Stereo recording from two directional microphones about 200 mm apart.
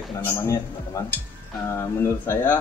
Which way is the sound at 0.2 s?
15° left (ahead or behind).